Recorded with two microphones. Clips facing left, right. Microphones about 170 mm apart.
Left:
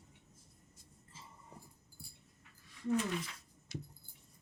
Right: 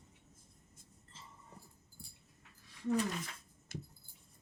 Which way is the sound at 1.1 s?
10° left (ahead or behind).